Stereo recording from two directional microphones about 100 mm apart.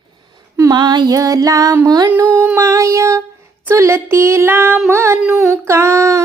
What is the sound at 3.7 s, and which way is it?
Speech, 25° right (ahead or behind).